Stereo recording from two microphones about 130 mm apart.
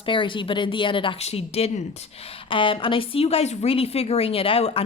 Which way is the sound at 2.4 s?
40° left (ahead or behind).